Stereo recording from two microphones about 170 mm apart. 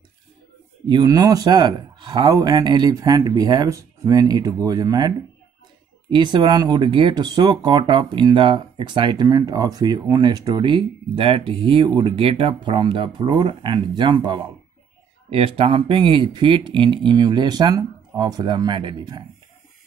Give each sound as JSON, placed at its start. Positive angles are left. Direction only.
{"t": 0.8, "sound": "speech", "side_deg": -25}